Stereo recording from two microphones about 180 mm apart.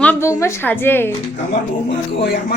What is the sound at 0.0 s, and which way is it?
A woman's voice, 10° left (ahead or behind).